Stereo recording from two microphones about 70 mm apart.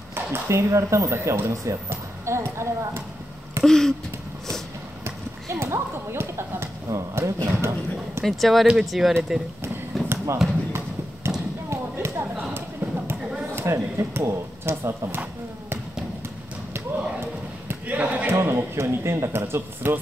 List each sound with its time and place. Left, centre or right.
0.1 s speech: right
3.6 s a sound: centre
5.0 s speech: right
8.2 s speech: centre
9.9 s basketball bounce: centre
10.4 s speech: centre
11.3 s a sound: centre
11.7 s a sound: right
12.4 s a sound: right
13.6 s speech: right
17.6 s basketball bounce: right
18.3 s speech: right